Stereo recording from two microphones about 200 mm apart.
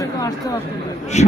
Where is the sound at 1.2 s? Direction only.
35° left (ahead or behind).